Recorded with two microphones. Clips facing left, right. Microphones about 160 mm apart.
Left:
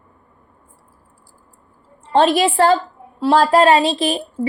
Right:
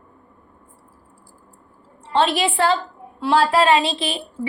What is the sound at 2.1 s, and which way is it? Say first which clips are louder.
A woman's voice: left 5 dB; 45° left (ahead or behind).